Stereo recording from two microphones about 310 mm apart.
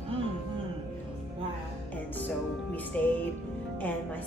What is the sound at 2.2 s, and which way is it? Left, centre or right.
Music, centre.